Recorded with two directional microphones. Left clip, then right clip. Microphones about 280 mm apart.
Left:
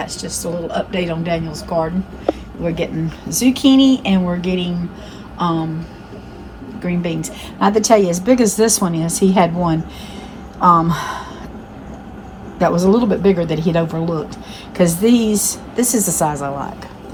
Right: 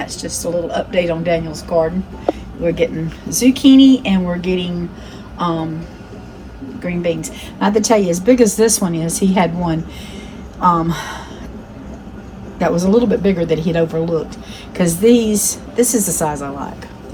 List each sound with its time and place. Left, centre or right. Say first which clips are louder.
0.0 s speech: right 2 dB; centre
2.6 s speech: right 4 dB; centre
6.8 s speech: right 3 dB; centre
12.5 s speech: even; centre